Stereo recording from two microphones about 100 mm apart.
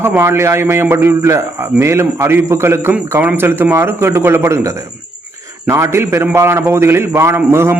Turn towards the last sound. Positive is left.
turn(degrees=-25)  # may be behind; listen again after turning